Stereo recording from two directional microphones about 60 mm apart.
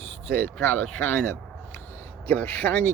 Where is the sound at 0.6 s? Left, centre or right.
Left.